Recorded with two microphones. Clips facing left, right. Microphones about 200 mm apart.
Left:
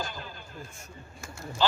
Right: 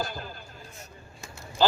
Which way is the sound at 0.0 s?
40° right (ahead or behind).